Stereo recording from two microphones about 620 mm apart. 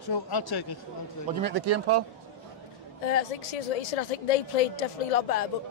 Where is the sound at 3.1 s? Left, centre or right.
Left.